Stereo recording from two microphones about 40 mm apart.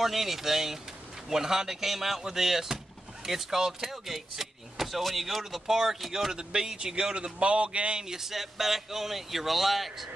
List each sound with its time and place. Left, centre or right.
0.0 s speech: centre
6.3 s a man's voice: centre
8.0 s speech: centre